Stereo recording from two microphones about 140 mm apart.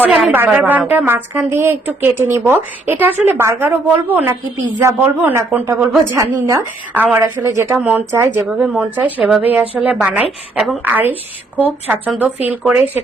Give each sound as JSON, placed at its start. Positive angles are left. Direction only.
{"t": 0.3, "sound": "a woman's voice", "side_deg": -10}
{"t": 8.4, "sound": "a woman's voice", "side_deg": -5}